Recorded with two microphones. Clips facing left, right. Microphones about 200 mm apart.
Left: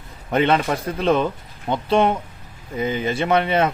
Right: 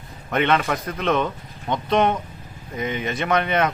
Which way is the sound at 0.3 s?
30° left (ahead or behind).